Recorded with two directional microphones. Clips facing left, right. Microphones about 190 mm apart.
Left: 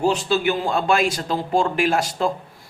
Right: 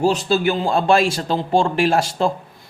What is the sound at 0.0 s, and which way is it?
A man's voice, 35° right (ahead or behind).